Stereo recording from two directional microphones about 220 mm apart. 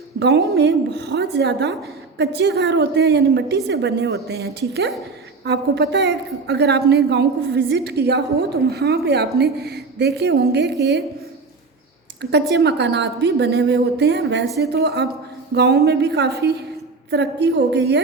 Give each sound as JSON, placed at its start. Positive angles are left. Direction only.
{"t": 0.2, "sound": "a woman's voice", "side_deg": -50}
{"t": 12.5, "sound": "a woman's voice", "side_deg": -50}